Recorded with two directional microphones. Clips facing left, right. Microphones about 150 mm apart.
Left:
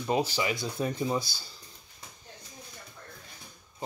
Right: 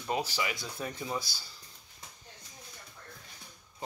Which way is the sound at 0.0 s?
20° left (ahead or behind).